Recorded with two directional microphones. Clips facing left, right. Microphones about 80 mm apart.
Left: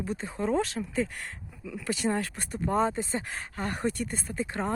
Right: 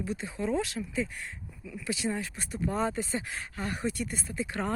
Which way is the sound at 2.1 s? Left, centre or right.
Left.